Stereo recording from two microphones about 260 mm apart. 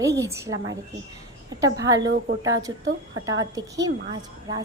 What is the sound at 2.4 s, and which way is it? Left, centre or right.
A woman's voice, centre.